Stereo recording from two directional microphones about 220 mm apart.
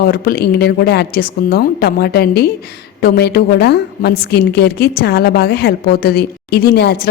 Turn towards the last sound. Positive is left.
turn(degrees=45)  # may be behind; listen again after turning